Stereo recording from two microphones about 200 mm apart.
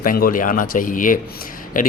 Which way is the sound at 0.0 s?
45° left (ahead or behind).